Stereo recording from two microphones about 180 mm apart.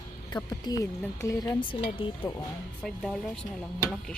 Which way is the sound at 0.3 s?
20° left (ahead or behind).